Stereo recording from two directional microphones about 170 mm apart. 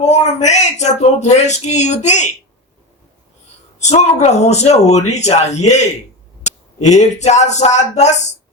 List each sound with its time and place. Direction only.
0.0 s speech: 40° left (ahead or behind)
3.8 s speech: 40° left (ahead or behind)